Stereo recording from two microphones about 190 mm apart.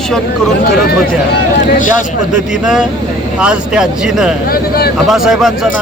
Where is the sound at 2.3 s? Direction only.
5° right (ahead or behind).